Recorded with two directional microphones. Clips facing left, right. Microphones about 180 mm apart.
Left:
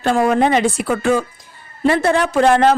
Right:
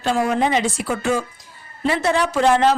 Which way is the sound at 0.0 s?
55° left (ahead or behind).